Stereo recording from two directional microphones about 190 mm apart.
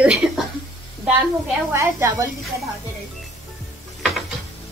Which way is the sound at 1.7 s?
15° right (ahead or behind).